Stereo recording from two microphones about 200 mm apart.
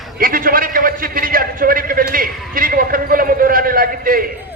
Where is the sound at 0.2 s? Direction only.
45° right (ahead or behind).